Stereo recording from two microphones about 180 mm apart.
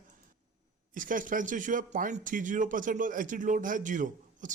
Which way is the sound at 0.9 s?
45° right (ahead or behind).